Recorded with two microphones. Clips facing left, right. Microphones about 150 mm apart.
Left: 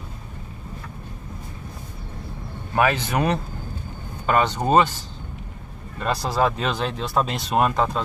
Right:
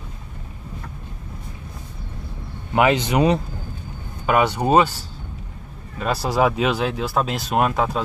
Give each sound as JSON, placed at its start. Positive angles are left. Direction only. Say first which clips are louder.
{"t": 2.7, "sound": "speech", "louder": "right 3 dB", "side_deg": -20}